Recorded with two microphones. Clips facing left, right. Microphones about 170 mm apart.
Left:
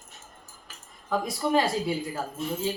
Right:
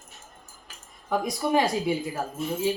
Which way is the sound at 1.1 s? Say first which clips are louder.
Right 1 dB; 15° right (ahead or behind).